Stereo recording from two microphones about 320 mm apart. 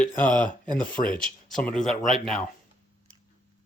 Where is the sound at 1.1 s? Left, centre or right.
Centre.